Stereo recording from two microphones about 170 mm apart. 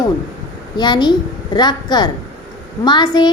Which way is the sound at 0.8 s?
25° left (ahead or behind).